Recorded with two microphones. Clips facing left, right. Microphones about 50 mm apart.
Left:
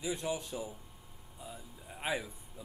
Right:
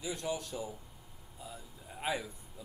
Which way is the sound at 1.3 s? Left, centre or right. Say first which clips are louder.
Even; centre.